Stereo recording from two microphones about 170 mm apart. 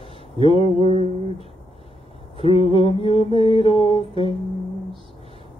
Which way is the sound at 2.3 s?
35° left (ahead or behind).